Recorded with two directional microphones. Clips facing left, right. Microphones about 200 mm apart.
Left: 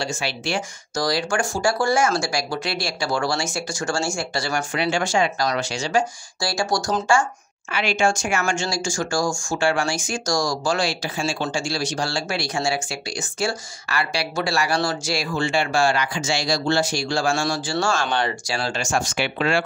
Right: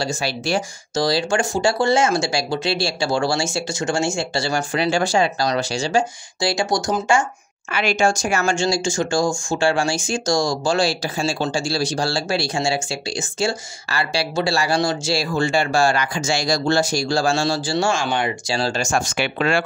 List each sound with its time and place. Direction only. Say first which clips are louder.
0.0 s speech: right 3 dB; 40° right (ahead or behind)
0.9 s speech: right 3 dB; 25° right (ahead or behind)
7.7 s speech: right 2 dB; 45° right (ahead or behind); by 15.2 s 25° right (ahead or behind)
15.3 s speech: right 2 dB; 40° right (ahead or behind)
17.8 s speech: even; 10° right (ahead or behind)
18.5 s speech: right 4 dB; 30° right (ahead or behind)
18.8 s speech: right 2 dB; 50° right (ahead or behind)